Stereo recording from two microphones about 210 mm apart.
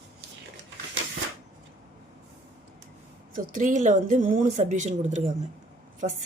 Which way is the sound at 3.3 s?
40° right (ahead or behind).